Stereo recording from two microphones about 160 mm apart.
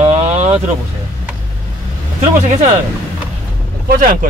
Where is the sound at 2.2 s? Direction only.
50° right (ahead or behind).